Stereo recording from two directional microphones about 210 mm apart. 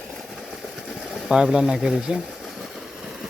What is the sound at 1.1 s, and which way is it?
Speech, 5° right (ahead or behind).